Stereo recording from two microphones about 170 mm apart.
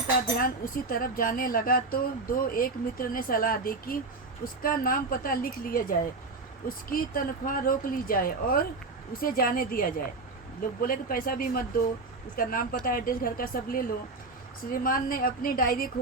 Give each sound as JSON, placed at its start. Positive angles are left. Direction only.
{"t": 0.3, "sound": "speech", "side_deg": 55}